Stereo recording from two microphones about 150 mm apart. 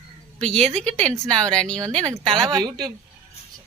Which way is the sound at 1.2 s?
5° left (ahead or behind).